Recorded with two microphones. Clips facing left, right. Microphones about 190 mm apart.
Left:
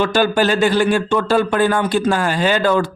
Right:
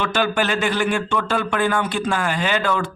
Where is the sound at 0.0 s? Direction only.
35° left (ahead or behind).